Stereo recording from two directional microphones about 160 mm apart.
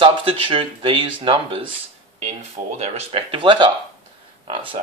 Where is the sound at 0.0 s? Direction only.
35° right (ahead or behind).